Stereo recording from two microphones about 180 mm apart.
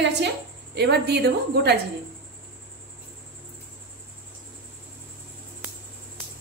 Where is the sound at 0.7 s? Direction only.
65° right (ahead or behind).